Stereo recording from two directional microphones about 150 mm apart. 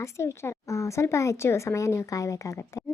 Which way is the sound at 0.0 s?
20° left (ahead or behind).